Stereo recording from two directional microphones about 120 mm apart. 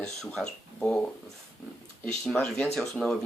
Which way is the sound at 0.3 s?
5° left (ahead or behind).